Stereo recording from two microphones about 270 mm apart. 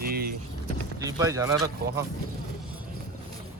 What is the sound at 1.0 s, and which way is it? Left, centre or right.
Speech, centre.